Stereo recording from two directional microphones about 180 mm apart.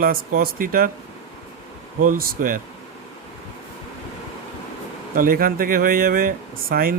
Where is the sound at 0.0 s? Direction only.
55° right (ahead or behind).